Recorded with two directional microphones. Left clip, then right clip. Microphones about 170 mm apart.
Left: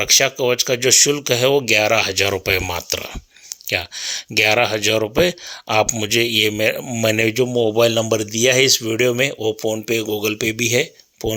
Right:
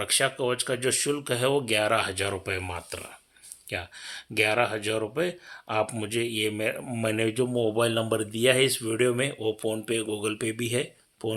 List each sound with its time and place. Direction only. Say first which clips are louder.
0.0 s speech: left 10 dB; 35° left (ahead or behind)
5.8 s speech: left 11 dB; 35° left (ahead or behind)